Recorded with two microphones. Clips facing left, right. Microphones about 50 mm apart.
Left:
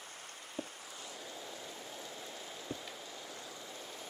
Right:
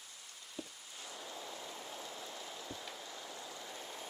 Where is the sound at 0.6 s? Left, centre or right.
Left.